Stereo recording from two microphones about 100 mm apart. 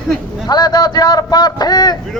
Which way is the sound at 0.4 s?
45° left (ahead or behind).